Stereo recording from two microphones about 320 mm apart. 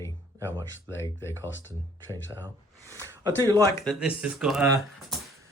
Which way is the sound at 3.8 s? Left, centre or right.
Centre.